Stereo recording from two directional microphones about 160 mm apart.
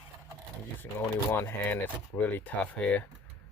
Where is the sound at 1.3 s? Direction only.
15° left (ahead or behind).